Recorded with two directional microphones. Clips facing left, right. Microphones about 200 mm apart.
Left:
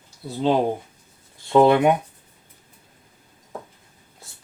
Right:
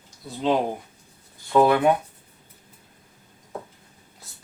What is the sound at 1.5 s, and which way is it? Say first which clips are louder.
Speech: left 3 dB; 25° left (ahead or behind).